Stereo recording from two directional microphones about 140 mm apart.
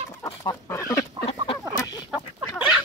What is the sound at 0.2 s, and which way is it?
Chicken, 20° left (ahead or behind).